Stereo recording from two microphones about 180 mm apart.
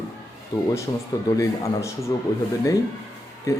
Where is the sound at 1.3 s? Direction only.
20° left (ahead or behind).